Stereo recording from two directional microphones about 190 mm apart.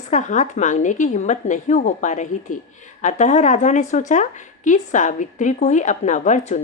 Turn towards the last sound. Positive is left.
turn(degrees=40)  # may be behind; listen again after turning